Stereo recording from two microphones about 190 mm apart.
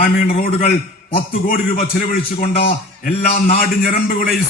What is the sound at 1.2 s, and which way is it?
A man's voice, 50° left (ahead or behind).